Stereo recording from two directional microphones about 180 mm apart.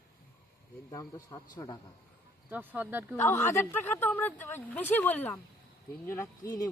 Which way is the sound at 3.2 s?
10° left (ahead or behind).